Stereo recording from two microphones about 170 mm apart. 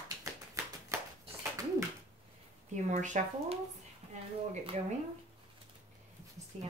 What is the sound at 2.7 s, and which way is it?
Speech, 45° right (ahead or behind).